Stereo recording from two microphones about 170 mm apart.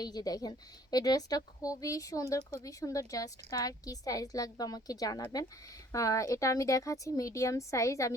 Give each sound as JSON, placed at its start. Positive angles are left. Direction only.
{"t": 0.0, "sound": "a woman's voice", "side_deg": 25}